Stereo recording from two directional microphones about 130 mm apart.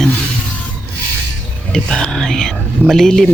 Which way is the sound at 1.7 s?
5° left (ahead or behind).